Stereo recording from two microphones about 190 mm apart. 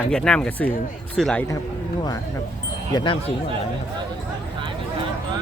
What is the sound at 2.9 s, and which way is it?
Speech, 25° left (ahead or behind).